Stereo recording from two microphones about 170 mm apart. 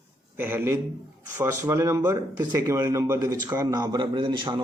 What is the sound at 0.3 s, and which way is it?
A man's voice, 10° right (ahead or behind).